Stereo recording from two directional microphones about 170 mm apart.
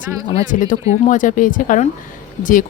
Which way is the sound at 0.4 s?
50° left (ahead or behind).